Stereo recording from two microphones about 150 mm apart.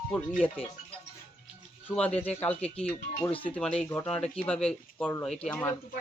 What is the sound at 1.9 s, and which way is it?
Speech, 10° left (ahead or behind).